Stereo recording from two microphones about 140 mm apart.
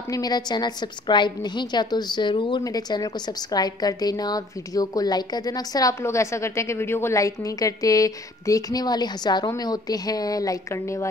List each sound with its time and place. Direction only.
0.1 s a woman's voice: 30° left (ahead or behind)